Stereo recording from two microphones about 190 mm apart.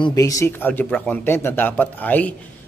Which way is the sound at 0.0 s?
20° left (ahead or behind).